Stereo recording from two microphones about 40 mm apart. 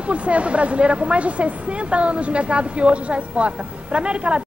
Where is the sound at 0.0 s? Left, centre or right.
Right.